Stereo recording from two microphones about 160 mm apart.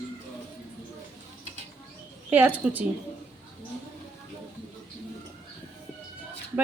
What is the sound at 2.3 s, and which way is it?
Speech, 10° right (ahead or behind).